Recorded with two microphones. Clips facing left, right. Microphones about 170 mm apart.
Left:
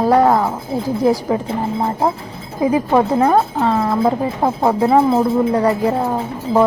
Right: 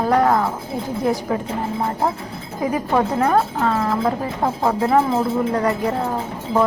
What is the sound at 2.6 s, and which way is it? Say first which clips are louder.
Speech: left 5 dB; 25° left (ahead or behind).